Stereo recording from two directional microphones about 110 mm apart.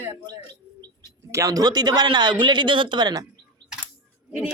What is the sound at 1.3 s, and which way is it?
Speech, 35° right (ahead or behind).